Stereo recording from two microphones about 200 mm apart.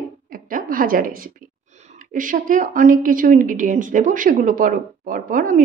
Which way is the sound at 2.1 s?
40° right (ahead or behind).